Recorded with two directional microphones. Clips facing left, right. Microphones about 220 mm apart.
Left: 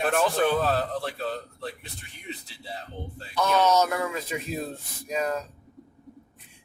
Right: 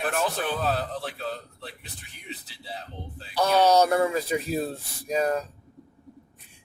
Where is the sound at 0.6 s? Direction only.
Centre (ahead or behind).